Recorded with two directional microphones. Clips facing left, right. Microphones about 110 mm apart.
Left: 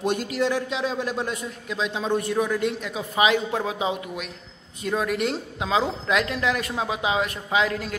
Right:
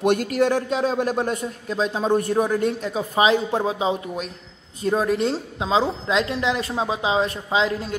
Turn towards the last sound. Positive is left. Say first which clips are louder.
# right 2 dB
turn(degrees=-30)  # may be behind; listen again after turning